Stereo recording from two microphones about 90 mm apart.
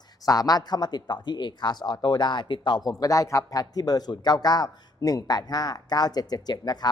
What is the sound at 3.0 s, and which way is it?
Speech, 40° left (ahead or behind).